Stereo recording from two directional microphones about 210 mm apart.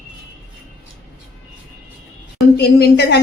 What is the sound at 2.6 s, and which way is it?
Speech, 50° left (ahead or behind).